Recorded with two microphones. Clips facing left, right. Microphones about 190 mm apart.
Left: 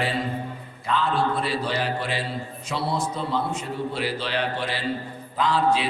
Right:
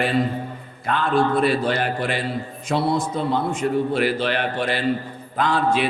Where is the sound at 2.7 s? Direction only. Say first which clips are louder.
Right 6 dB; 50° right (ahead or behind).